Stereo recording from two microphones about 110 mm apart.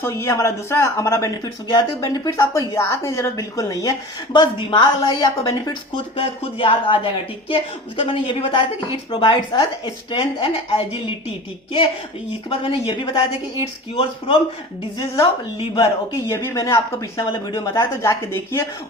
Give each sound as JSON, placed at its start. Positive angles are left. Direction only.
{"t": 0.0, "sound": "a woman's voice", "side_deg": 25}
{"t": 6.1, "sound": "speech", "side_deg": 55}
{"t": 12.5, "sound": "speech", "side_deg": 55}
{"t": 14.9, "sound": "a woman's voice", "side_deg": 30}